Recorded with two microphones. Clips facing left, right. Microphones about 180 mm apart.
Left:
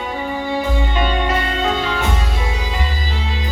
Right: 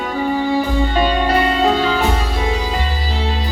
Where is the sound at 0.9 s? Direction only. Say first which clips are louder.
Right 5 dB; 35° right (ahead or behind).